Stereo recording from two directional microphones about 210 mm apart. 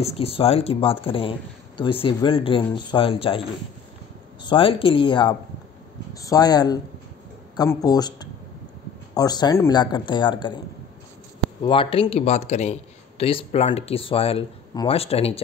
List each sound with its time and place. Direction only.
0.0 s speech: 30° left (ahead or behind)
11.6 s speech: 25° left (ahead or behind)